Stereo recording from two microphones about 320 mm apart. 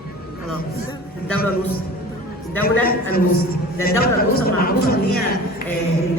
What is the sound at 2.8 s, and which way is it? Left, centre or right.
Speech, left.